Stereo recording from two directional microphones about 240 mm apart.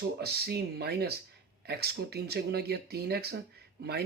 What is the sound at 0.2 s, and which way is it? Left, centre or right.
Speech, right.